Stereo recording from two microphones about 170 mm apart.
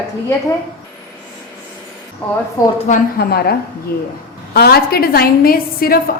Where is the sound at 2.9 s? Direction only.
65° left (ahead or behind).